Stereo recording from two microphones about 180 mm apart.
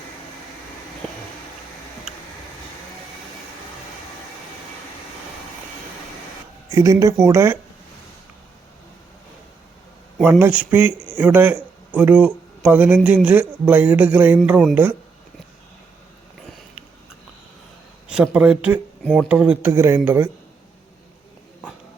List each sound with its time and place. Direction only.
6.7 s a man's voice: 20° right (ahead or behind)
10.2 s a man's voice: 10° right (ahead or behind)
16.5 s sniff: centre (ahead or behind)
18.1 s a man's voice: 5° right (ahead or behind)